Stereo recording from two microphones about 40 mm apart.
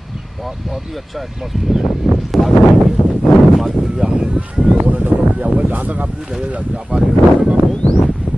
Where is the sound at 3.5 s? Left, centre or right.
Centre.